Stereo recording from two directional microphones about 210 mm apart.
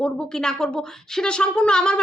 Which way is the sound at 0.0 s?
5° left (ahead or behind).